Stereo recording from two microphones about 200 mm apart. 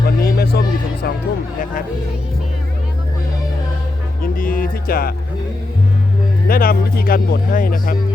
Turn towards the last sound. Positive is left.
turn(degrees=45)  # may be behind; listen again after turning